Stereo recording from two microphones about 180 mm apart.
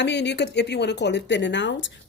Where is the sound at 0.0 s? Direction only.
75° left (ahead or behind).